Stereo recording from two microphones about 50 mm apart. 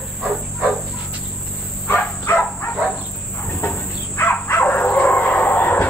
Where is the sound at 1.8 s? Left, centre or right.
Left.